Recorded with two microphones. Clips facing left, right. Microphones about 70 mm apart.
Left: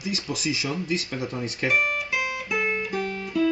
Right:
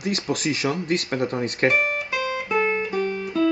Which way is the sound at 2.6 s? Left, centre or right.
Right.